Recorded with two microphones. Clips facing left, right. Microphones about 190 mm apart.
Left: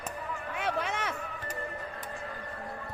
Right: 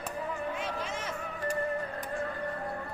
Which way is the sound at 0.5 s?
65° left (ahead or behind).